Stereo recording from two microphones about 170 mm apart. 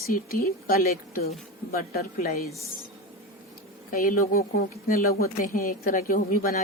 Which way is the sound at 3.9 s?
55° left (ahead or behind).